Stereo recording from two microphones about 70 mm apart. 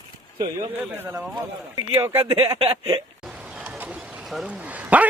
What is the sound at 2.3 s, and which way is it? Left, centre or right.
Speech, right.